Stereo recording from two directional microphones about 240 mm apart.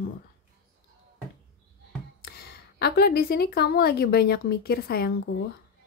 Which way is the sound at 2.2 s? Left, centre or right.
Left.